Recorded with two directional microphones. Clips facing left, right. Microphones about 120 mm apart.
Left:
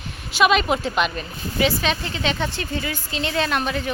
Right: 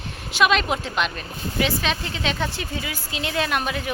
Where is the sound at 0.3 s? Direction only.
Centre (ahead or behind).